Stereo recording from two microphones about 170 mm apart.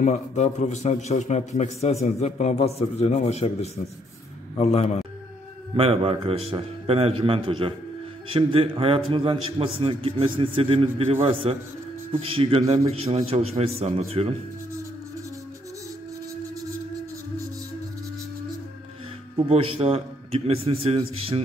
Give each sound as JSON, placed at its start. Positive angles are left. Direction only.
{"t": 0.0, "sound": "a man's voice", "side_deg": 45}
{"t": 5.8, "sound": "a man's voice", "side_deg": -35}
{"t": 19.3, "sound": "a man's voice", "side_deg": -35}